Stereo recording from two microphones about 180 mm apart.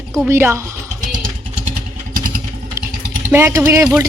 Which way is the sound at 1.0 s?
45° right (ahead or behind).